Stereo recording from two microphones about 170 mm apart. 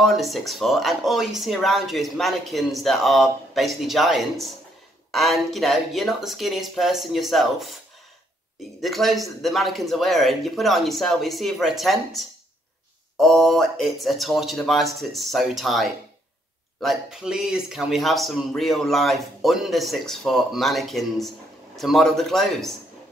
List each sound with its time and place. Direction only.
0.0 s speech: centre (ahead or behind)
8.8 s speech: centre (ahead or behind)